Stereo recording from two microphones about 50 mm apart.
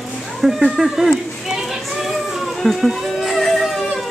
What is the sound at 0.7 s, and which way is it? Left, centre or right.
Speech, centre.